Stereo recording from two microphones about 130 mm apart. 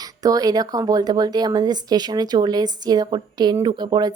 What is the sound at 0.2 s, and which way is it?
A woman's voice, 30° right (ahead or behind).